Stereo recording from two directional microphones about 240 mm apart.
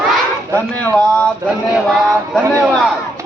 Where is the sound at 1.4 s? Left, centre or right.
Centre.